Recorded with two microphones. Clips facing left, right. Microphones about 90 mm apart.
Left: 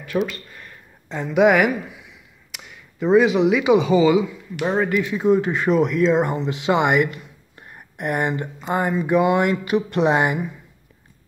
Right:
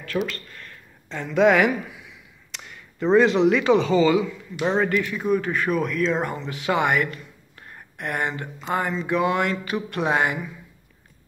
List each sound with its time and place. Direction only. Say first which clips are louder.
0.0 s speech: left 3 dB; 15° left (ahead or behind)
5.1 s speech: left 5 dB; 25° left (ahead or behind)